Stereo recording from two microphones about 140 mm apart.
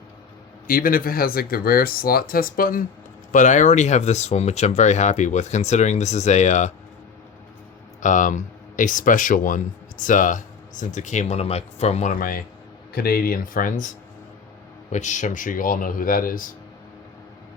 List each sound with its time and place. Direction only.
0.7 s speech: 90° left
3.3 s speech: 65° left (ahead or behind)
8.0 s speech: 65° left (ahead or behind)
12.9 s speech: 90° left; by 13.9 s 70° left (ahead or behind)
14.9 s speech: 60° left (ahead or behind); by 16.5 s 80° left